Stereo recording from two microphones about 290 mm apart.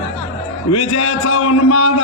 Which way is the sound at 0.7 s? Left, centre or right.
Left.